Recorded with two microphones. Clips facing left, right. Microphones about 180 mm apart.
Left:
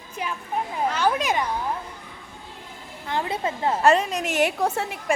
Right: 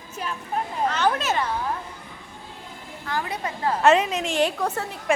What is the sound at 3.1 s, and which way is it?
Speech, 25° left (ahead or behind).